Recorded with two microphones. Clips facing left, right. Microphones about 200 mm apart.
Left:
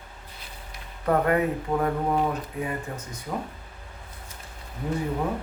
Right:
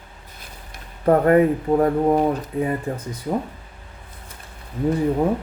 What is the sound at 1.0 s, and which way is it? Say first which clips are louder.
Speech: right 7 dB; 35° right (ahead or behind).